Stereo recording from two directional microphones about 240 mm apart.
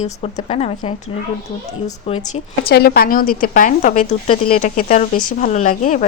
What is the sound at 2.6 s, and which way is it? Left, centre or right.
Speech, left.